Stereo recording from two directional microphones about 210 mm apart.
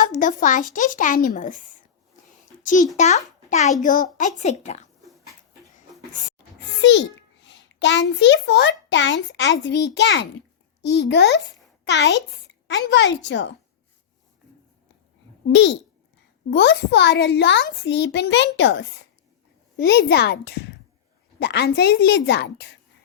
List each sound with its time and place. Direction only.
0.0 s speech: 40° left (ahead or behind)
3.0 s speech: 35° left (ahead or behind)
6.8 s a child's voice: 60° left (ahead or behind)
15.4 s a child's voice: 60° left (ahead or behind)